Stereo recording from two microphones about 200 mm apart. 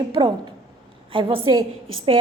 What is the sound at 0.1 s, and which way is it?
A woman's voice, 25° right (ahead or behind).